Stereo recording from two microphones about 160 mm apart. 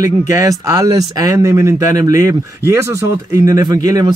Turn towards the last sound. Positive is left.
turn(degrees=-20)  # may be behind; listen again after turning